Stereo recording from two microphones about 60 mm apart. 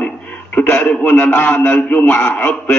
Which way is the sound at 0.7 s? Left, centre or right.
Left.